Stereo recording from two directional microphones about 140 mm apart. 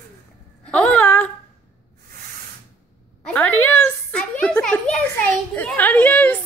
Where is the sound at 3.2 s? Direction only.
10° left (ahead or behind).